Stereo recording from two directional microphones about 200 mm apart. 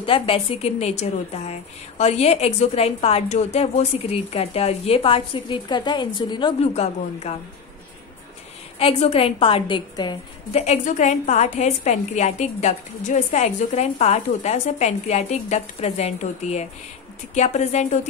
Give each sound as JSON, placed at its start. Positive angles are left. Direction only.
{"t": 0.0, "sound": "a woman's voice", "side_deg": 25}
{"t": 8.7, "sound": "a woman's voice", "side_deg": 30}
{"t": 10.6, "sound": "a woman's voice", "side_deg": 35}